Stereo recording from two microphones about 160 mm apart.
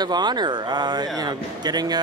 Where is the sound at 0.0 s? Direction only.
25° right (ahead or behind).